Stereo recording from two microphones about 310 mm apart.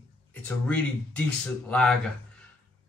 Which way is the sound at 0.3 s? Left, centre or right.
Centre.